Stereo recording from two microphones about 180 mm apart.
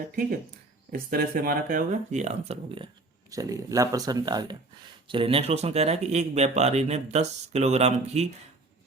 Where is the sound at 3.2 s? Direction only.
20° right (ahead or behind).